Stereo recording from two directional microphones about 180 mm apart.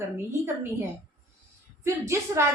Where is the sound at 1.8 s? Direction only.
15° right (ahead or behind).